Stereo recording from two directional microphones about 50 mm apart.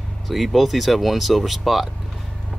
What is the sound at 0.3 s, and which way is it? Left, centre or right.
Speech, centre.